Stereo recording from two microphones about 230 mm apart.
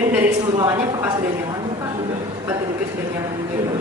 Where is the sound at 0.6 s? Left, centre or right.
Centre.